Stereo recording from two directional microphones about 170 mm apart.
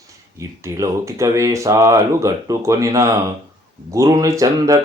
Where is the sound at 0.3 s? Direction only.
15° right (ahead or behind).